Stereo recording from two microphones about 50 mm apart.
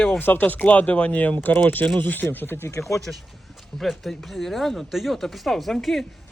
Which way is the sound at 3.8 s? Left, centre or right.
Centre.